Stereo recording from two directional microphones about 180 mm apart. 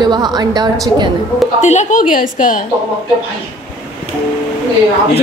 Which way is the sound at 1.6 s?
40° left (ahead or behind).